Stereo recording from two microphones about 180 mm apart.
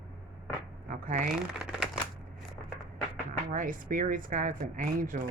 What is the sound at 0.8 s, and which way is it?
Speech, 50° right (ahead or behind).